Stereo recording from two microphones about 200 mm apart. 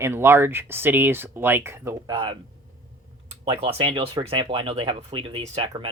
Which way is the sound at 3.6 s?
25° right (ahead or behind).